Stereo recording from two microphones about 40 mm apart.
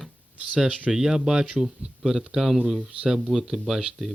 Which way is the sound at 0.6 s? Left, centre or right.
Right.